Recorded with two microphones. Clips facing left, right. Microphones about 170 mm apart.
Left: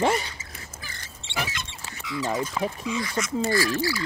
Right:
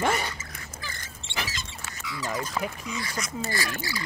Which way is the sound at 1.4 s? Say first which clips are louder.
Left 4 dB; 60° left (ahead or behind).